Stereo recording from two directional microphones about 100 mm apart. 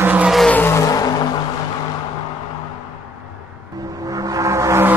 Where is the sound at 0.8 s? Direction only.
35° left (ahead or behind).